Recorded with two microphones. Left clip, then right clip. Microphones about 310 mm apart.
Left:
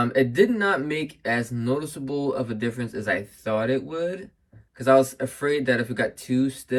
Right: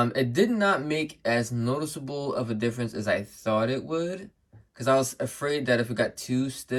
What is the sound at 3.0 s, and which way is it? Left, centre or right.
Speech, centre.